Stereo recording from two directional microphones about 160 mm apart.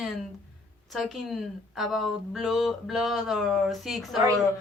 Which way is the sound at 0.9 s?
Centre (ahead or behind).